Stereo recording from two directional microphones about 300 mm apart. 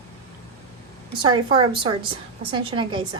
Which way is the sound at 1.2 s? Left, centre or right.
Centre.